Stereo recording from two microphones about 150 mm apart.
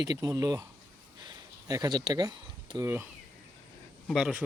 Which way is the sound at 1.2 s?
25° right (ahead or behind).